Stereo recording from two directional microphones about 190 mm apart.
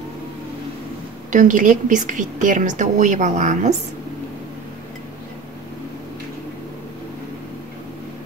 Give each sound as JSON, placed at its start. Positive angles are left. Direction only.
{"t": 1.3, "sound": "a woman's voice", "side_deg": -45}